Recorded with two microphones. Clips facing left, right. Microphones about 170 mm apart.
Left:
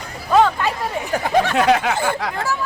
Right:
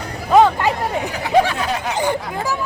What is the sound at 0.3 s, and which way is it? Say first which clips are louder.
Speech: right 3 dB; 15° right (ahead or behind).